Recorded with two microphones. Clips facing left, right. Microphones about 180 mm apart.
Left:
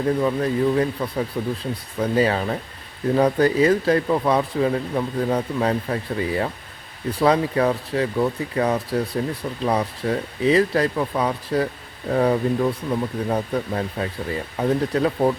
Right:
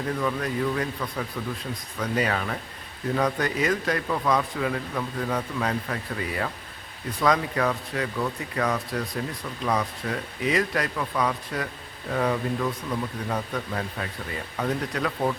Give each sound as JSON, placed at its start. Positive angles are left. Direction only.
{"t": 0.2, "sound": "speech", "side_deg": 30}